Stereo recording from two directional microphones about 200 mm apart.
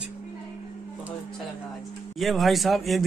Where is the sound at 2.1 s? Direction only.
Centre (ahead or behind).